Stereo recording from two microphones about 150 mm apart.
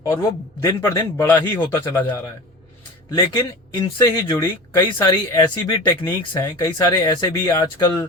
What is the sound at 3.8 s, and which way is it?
Speech, 20° left (ahead or behind).